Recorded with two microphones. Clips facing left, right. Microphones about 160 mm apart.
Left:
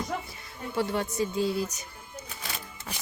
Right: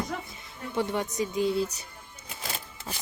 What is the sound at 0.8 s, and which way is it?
Speech, 20° right (ahead or behind).